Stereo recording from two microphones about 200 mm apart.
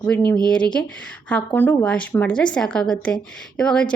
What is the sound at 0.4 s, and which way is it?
A woman's voice, 5° left (ahead or behind).